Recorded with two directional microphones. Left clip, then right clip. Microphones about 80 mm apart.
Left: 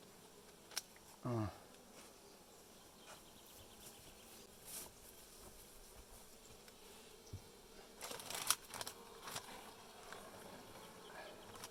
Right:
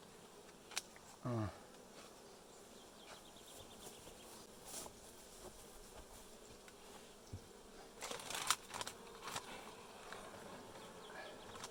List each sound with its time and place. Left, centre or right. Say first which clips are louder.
1.2 s speech: left 1 dB; centre
8.0 s insect: right 2 dB; centre
10.1 s insect: right 2 dB; centre